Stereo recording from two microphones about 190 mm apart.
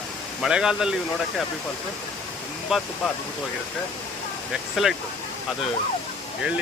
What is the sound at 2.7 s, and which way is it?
Speech, centre (ahead or behind).